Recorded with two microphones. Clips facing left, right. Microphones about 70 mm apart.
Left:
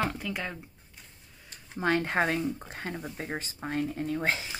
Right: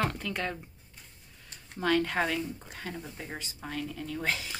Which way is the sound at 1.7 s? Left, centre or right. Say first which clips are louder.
Left 1 dB; left.